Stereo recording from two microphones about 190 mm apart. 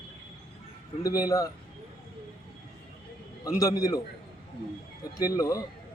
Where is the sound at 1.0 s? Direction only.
20° left (ahead or behind).